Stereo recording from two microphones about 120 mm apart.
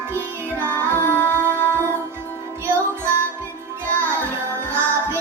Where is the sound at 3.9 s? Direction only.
15° left (ahead or behind).